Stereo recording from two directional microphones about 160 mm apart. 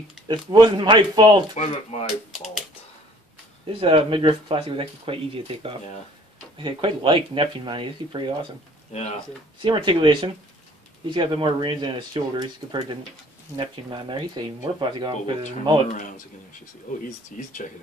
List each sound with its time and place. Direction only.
0.3 s speech: 30° right (ahead or behind)
1.5 s speech: 40° left (ahead or behind)
3.8 s speech: 35° right (ahead or behind)
8.9 s speech: 40° left (ahead or behind)
9.6 s speech: 30° right (ahead or behind)
15.9 s speech: 50° left (ahead or behind)